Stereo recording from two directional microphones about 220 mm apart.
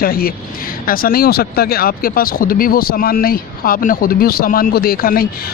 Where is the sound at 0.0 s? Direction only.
45° left (ahead or behind).